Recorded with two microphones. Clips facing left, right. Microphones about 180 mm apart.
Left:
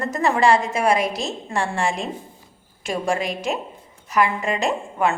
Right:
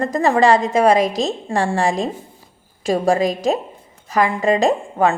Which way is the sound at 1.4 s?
40° right (ahead or behind).